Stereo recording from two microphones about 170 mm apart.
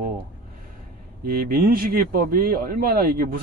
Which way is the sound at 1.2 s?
65° right (ahead or behind).